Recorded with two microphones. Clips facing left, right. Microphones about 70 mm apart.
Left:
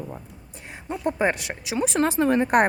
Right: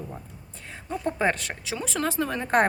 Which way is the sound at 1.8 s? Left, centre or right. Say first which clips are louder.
Left 6 dB; left.